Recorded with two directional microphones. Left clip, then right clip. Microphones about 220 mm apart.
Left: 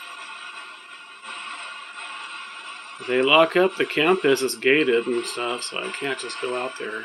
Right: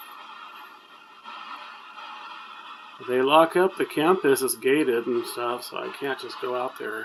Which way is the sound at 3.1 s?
10° right (ahead or behind).